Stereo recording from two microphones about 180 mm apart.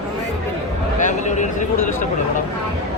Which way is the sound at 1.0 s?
40° left (ahead or behind).